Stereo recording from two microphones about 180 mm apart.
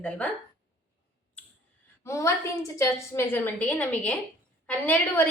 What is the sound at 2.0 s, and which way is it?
A woman's voice, 15° left (ahead or behind).